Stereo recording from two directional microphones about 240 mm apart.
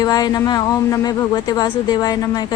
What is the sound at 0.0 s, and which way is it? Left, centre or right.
Speech, centre.